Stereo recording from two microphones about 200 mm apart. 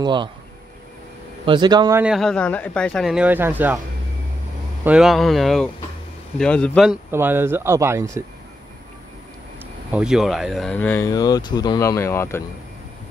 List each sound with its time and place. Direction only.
0.0 s speech: 25° right (ahead or behind)
1.4 s speech: 25° right (ahead or behind)
2.0 s speech: centre (ahead or behind)
4.8 s speech: 5° right (ahead or behind)
7.1 s speech: 10° right (ahead or behind)
9.8 s speech: 5° right (ahead or behind); by 12.4 s 10° left (ahead or behind)